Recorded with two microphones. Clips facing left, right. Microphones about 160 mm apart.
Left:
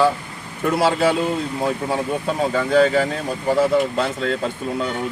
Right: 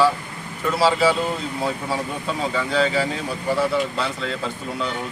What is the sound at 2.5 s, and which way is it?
Speech, 50° left (ahead or behind).